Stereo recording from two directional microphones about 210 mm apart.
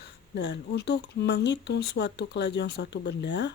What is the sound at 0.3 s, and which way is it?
Speech, 55° left (ahead or behind).